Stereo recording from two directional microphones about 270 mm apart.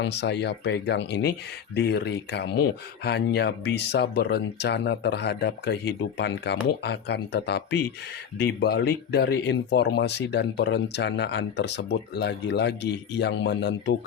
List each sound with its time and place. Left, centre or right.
0.0 s speech: left